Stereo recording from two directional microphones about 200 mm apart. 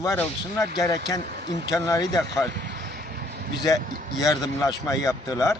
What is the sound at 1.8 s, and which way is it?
Speech, 15° left (ahead or behind).